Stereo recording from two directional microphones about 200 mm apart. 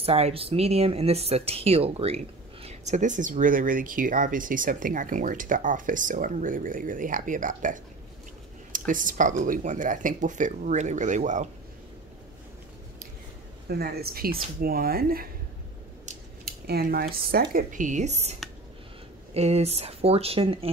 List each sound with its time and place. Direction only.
0.0 s speech: 30° right (ahead or behind)
13.7 s speech: 50° right (ahead or behind); by 20.7 s 30° right (ahead or behind)